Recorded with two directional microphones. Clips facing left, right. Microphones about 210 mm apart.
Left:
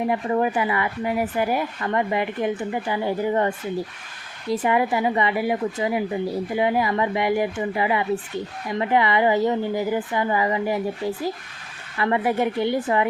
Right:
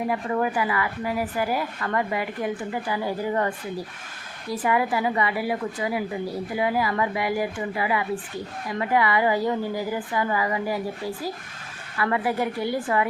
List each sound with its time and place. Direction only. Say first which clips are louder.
0.1 s a woman's voice: left 3 dB; 25° left (ahead or behind)